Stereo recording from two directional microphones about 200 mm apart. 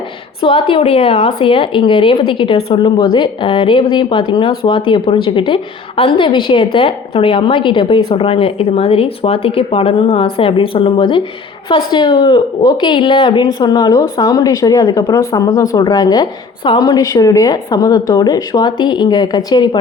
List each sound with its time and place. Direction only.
0.4 s a woman's voice: 25° left (ahead or behind)